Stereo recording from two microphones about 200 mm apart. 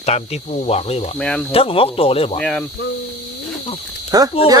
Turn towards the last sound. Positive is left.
turn(degrees=-20)  # may be behind; listen again after turning